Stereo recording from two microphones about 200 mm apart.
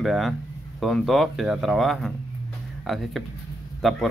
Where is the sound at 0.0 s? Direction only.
Centre (ahead or behind).